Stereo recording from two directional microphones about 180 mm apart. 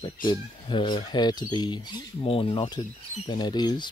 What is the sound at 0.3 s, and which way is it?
Speech, 25° left (ahead or behind).